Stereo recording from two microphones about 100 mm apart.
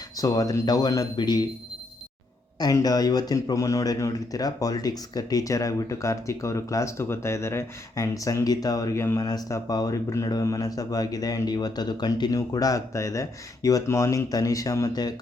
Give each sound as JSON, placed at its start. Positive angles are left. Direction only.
{"t": 0.2, "sound": "speech", "side_deg": 35}
{"t": 2.6, "sound": "speech", "side_deg": 40}